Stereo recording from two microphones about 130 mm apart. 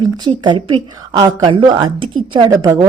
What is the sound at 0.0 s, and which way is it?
A woman's voice, 35° right (ahead or behind).